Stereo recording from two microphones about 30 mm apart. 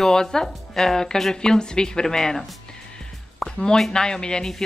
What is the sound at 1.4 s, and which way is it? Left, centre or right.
Speech, left.